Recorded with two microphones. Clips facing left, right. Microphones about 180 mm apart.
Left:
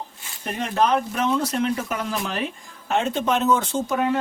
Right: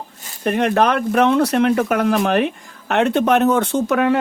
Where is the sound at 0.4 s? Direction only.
65° right (ahead or behind).